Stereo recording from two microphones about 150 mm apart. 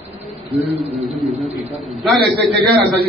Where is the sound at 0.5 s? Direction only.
45° right (ahead or behind).